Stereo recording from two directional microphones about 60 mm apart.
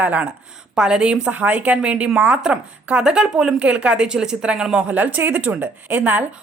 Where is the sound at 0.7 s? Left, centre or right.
Centre.